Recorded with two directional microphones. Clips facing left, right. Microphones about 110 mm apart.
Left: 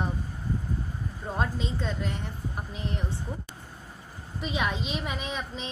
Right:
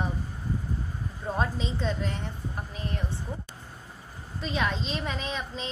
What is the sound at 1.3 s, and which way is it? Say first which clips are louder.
Speech: right 1 dB; 5° left (ahead or behind).